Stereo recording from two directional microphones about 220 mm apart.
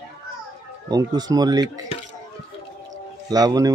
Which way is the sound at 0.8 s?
20° right (ahead or behind).